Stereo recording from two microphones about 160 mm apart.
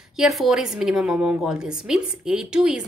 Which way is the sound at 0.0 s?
Centre (ahead or behind).